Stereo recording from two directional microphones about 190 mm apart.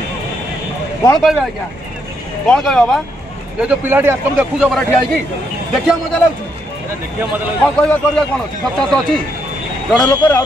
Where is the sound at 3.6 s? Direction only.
10° right (ahead or behind).